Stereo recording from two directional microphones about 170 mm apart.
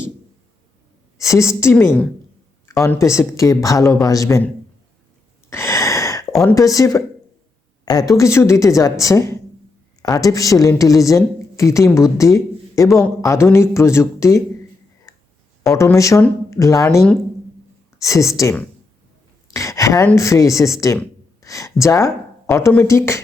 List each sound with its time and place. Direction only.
1.2 s a woman's voice: 15° left (ahead or behind)
5.5 s a sound: 15° left (ahead or behind)
6.4 s a woman's voice: 20° left (ahead or behind)
15.1 s clicking: 20° left (ahead or behind)
15.7 s a woman's voice: 20° left (ahead or behind)